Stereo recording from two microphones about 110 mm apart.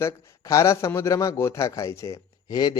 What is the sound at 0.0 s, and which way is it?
A man's voice, 25° left (ahead or behind).